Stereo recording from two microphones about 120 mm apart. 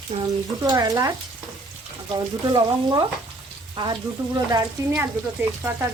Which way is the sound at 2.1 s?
35° right (ahead or behind).